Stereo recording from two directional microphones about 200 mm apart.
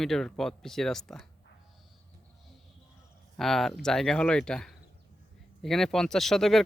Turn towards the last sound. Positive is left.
turn(degrees=0)  # may be behind; listen again after turning